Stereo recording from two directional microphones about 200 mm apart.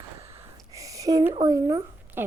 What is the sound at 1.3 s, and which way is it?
Speech, 20° right (ahead or behind).